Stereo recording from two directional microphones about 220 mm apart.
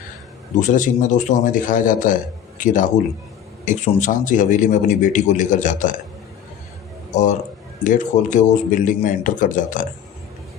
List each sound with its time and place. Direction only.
0.6 s a man's voice: 35° left (ahead or behind)
7.1 s a man's voice: 35° left (ahead or behind)